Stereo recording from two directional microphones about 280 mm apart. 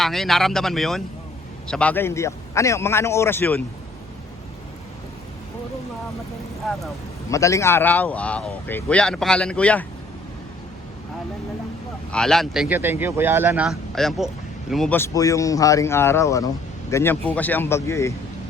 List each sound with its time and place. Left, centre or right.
0.0 s a man's voice: centre
7.3 s speech: centre
12.1 s a man's voice: centre